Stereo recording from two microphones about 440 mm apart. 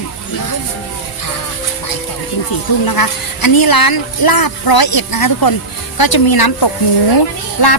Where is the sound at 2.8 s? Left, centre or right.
Left.